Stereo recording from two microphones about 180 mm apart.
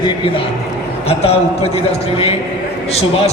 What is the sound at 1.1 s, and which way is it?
Speech, 35° left (ahead or behind).